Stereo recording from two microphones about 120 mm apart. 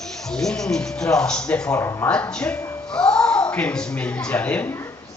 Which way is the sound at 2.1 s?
10° left (ahead or behind).